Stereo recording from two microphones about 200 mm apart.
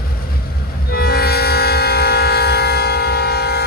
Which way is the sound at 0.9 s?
50° left (ahead or behind).